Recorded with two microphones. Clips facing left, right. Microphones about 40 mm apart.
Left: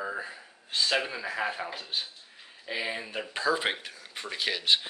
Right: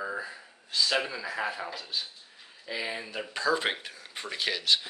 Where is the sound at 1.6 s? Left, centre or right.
Left.